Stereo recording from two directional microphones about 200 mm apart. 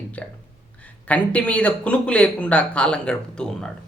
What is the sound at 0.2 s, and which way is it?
Speech, 5° left (ahead or behind).